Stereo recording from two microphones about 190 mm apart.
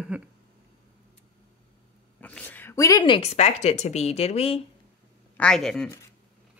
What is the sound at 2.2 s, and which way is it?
A woman's voice, 10° left (ahead or behind).